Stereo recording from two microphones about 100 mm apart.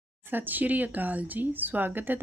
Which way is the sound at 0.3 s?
20° right (ahead or behind).